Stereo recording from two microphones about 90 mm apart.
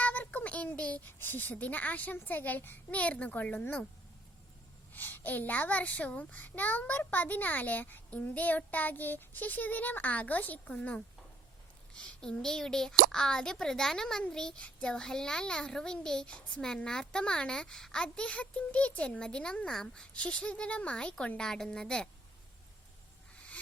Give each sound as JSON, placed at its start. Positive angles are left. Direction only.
{"t": 0.0, "sound": "a child's voice", "side_deg": 20}
{"t": 4.9, "sound": "a child's voice", "side_deg": 20}